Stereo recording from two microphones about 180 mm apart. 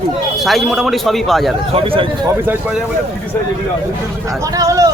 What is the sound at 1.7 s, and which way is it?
Speech, 30° right (ahead or behind).